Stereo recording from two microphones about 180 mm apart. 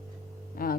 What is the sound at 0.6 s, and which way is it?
Music, 50° left (ahead or behind).